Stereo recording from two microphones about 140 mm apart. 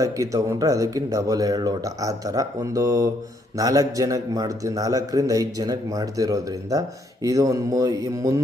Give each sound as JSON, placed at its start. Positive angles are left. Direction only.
{"t": 0.0, "sound": "a man's voice", "side_deg": -20}